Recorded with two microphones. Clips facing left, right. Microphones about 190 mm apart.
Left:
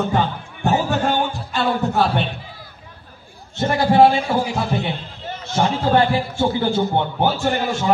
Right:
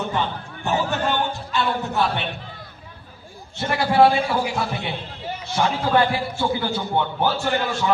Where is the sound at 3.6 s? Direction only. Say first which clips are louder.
Left 4 dB; 35° left (ahead or behind).